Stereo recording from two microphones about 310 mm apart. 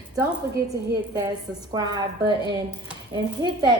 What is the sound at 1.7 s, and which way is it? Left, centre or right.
Speech, centre.